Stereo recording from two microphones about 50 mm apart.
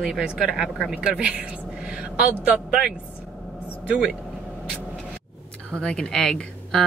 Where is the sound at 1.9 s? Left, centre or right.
Centre.